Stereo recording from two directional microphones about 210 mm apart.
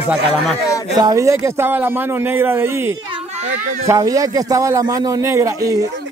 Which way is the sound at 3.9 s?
15° right (ahead or behind).